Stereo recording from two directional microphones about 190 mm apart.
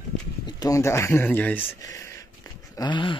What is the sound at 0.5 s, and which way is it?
A man's voice, 20° left (ahead or behind).